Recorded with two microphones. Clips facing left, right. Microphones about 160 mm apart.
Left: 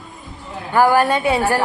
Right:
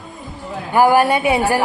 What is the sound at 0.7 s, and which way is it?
Speech, 15° right (ahead or behind).